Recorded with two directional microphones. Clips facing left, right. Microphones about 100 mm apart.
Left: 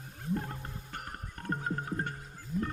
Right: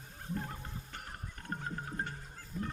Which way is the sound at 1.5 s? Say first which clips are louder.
Left 6 dB; 50° left (ahead or behind).